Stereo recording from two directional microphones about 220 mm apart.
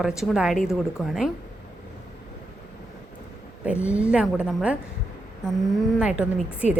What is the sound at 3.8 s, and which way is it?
Speech, 5° right (ahead or behind).